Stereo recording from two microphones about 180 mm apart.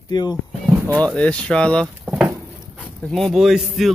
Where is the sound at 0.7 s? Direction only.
10° right (ahead or behind).